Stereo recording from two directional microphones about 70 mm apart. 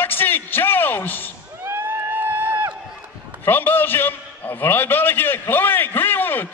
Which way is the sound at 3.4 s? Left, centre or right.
Left.